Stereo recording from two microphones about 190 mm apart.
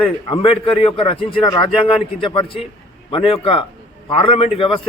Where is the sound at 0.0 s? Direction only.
30° left (ahead or behind).